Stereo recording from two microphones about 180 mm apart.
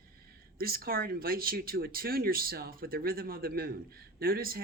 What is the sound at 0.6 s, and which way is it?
Speech, 55° right (ahead or behind).